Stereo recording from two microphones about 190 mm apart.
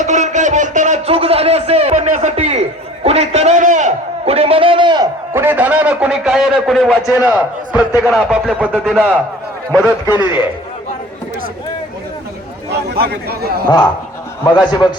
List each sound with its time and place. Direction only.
0.0 s a sound: 40° right (ahead or behind)
5.3 s a man's voice: 10° right (ahead or behind)
10.1 s a man's voice: 25° left (ahead or behind)
12.7 s speech: 55° right (ahead or behind)
14.4 s a man's voice: 25° left (ahead or behind)